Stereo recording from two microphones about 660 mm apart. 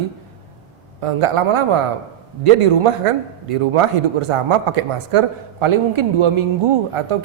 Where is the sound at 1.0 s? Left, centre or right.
Right.